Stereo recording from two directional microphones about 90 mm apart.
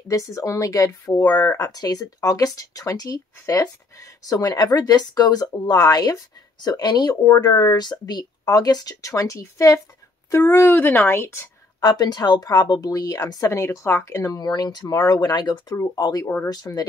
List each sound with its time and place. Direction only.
0.1 s speech: 35° left (ahead or behind)
11.8 s speech: 50° left (ahead or behind)
15.7 s speech: 35° left (ahead or behind)